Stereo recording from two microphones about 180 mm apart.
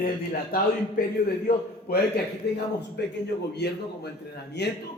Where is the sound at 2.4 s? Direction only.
65° left (ahead or behind).